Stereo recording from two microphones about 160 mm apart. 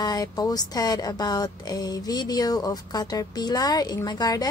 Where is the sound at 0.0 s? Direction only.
25° left (ahead or behind).